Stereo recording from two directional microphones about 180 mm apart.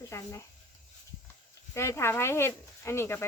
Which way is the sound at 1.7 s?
15° left (ahead or behind).